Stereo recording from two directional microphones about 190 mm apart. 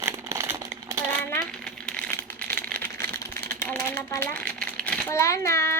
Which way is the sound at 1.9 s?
5° left (ahead or behind).